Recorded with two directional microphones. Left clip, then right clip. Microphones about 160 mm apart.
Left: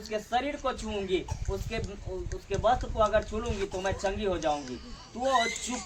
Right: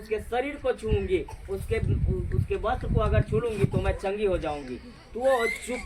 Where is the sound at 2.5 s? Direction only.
20° left (ahead or behind).